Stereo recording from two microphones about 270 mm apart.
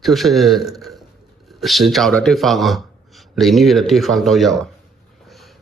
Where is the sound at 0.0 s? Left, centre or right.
Centre.